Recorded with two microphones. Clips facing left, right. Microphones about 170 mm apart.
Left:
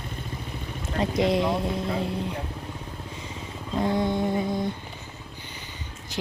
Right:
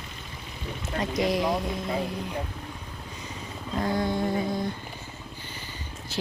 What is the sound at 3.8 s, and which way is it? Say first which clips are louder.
Speech: left 2 dB; 20° left (ahead or behind).